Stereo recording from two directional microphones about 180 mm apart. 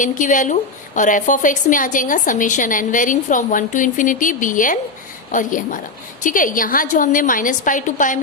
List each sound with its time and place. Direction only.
0.0 s a woman's voice: 45° left (ahead or behind)